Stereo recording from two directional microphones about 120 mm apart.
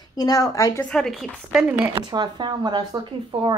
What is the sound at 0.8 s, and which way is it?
Speech, 5° left (ahead or behind).